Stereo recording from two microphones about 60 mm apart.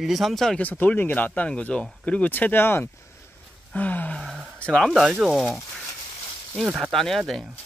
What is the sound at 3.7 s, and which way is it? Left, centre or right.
Speech, left.